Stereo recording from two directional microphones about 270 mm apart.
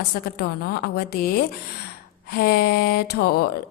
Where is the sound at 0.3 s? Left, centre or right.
Left.